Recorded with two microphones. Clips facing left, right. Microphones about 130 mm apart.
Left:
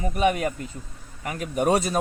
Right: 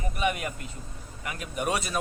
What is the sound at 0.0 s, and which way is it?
A man's voice, 40° left (ahead or behind).